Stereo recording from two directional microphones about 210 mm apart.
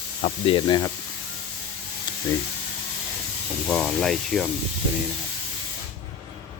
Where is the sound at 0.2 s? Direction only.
25° left (ahead or behind).